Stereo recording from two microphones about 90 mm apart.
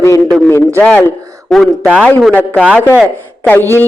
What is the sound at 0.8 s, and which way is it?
Speech, 15° left (ahead or behind).